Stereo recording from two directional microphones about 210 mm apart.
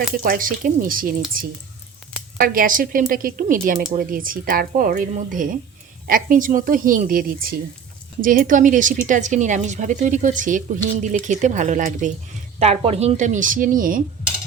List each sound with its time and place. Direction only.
0.2 s speech: 40° right (ahead or behind)
2.4 s speech: 40° right (ahead or behind)